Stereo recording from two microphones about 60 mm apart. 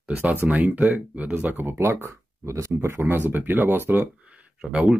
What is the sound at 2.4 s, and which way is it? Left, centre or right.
Speech, right.